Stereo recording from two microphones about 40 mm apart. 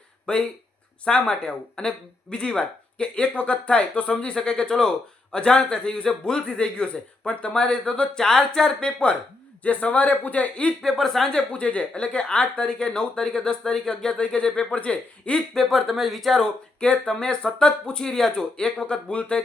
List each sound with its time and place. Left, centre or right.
0.3 s speech: left
8.8 s a man's voice: left
10.8 s speech: centre
11.5 s speech: left
15.5 s speech: centre
16.8 s speech: left